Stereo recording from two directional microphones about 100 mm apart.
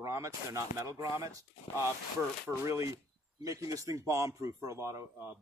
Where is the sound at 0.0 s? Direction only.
30° right (ahead or behind).